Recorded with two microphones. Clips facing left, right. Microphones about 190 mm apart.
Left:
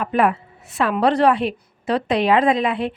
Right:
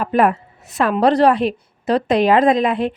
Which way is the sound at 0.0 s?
40° right (ahead or behind).